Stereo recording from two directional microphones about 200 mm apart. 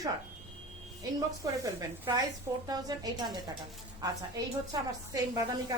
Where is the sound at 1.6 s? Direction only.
15° right (ahead or behind).